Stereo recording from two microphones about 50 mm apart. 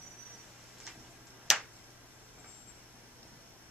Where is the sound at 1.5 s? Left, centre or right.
Centre.